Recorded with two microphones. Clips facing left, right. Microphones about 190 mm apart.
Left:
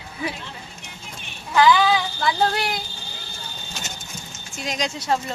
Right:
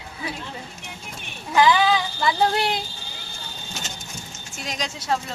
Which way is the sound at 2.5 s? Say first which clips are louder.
Right 2 dB; 25° right (ahead or behind).